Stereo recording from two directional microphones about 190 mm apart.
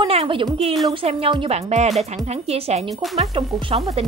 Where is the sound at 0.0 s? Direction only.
30° right (ahead or behind).